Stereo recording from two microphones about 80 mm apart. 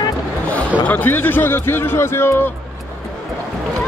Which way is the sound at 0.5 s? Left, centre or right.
Left.